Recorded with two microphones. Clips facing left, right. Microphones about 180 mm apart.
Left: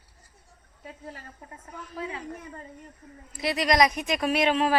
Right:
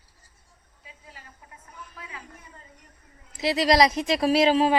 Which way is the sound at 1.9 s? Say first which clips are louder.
Left 12 dB; 30° left (ahead or behind).